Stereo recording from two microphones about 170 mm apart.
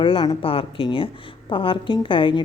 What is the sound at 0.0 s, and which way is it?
A woman's voice, 30° left (ahead or behind).